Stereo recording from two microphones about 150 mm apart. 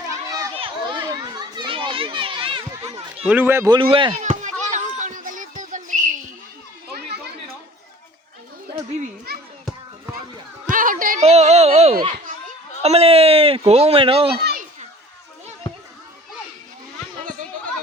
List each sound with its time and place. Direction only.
0.3 s children playing: 20° right (ahead or behind)
0.5 s children playing: 35° right (ahead or behind)
3.2 s a man's voice: 10° right (ahead or behind)
3.7 s speech: 35° right (ahead or behind)
4.2 s children playing: 55° right (ahead or behind)
9.3 s children playing: 90° right
10.7 s a sound: 65° right (ahead or behind)
11.2 s a sound: 45° right (ahead or behind)
14.4 s a sound: 75° right (ahead or behind)